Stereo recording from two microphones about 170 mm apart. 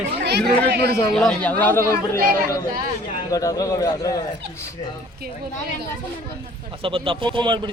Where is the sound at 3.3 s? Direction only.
20° left (ahead or behind).